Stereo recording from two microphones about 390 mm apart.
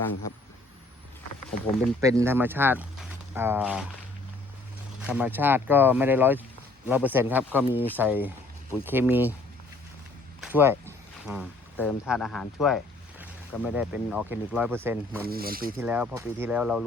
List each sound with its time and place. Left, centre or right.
2.0 s speech: centre
5.0 s speech: centre
10.4 s speech: centre
15.3 s speech: right
15.8 s speech: centre